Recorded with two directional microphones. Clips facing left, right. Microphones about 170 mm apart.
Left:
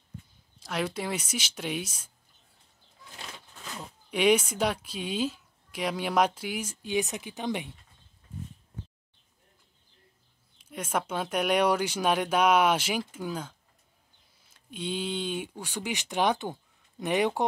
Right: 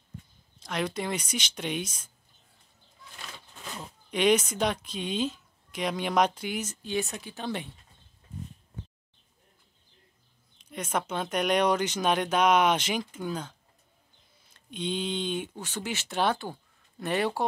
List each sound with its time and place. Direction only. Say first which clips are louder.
0.6 s speech: even; 5° left (ahead or behind)
3.7 s speech: even; 5° left (ahead or behind)
10.6 s speech: even; 10° left (ahead or behind)